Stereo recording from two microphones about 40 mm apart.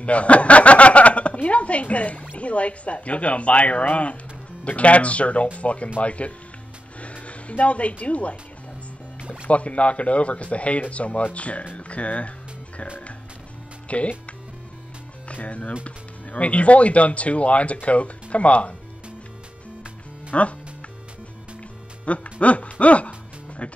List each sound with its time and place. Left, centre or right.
0.0 s speech: left
9.2 s speech: right
9.5 s speech: left
13.8 s speech: left
15.3 s speech: left
20.3 s speech: left
22.0 s speech: left